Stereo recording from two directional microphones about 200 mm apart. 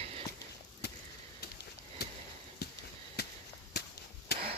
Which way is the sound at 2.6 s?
55° left (ahead or behind).